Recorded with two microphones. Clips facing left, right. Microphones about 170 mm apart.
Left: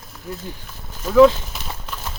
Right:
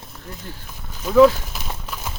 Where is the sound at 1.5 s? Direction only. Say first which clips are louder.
Even; 5° right (ahead or behind).